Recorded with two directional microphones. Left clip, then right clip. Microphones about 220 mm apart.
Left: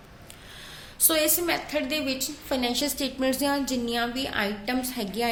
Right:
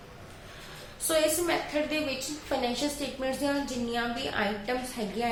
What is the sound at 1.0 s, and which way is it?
A woman's voice, 50° left (ahead or behind).